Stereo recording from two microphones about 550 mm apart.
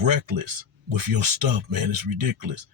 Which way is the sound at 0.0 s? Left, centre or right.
Right.